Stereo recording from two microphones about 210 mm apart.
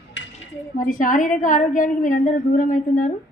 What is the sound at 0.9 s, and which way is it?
A woman's voice, 40° left (ahead or behind).